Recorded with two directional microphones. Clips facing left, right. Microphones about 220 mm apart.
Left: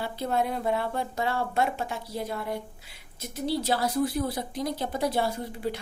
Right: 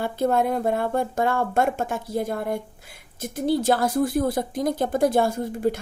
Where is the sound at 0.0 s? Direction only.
50° right (ahead or behind).